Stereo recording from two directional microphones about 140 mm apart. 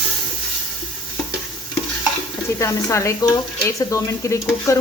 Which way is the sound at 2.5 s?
20° left (ahead or behind).